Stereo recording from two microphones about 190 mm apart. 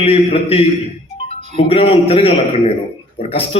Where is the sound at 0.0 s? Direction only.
30° left (ahead or behind).